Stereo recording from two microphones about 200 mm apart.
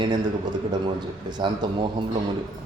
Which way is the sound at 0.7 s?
20° right (ahead or behind).